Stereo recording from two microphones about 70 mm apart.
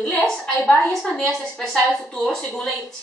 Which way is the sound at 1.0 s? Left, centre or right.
Centre.